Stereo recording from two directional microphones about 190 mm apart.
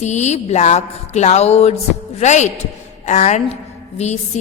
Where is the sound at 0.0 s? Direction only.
35° left (ahead or behind).